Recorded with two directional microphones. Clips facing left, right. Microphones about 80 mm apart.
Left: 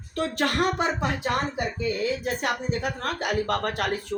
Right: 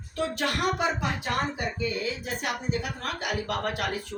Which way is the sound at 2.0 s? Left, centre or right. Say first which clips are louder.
Left 5 dB; left.